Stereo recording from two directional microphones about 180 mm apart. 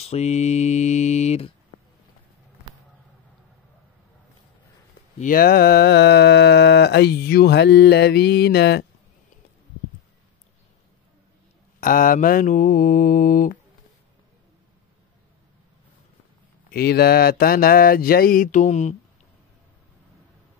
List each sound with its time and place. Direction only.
0.0 s mantra: 35° left (ahead or behind)
5.2 s mantra: 55° left (ahead or behind)
11.8 s mantra: 50° left (ahead or behind)
16.7 s mantra: 60° left (ahead or behind); by 18.9 s 40° left (ahead or behind)